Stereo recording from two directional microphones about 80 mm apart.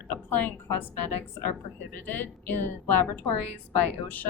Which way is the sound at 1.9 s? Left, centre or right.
Left.